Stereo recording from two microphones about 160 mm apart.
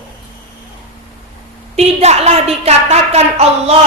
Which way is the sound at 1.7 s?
40° right (ahead or behind).